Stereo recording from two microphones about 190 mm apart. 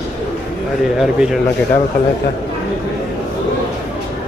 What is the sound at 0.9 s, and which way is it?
Speech, centre (ahead or behind).